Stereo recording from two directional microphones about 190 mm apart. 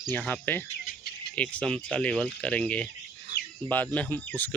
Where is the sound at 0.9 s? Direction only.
55° left (ahead or behind).